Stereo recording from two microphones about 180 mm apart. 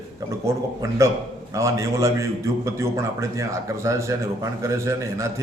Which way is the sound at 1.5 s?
15° right (ahead or behind).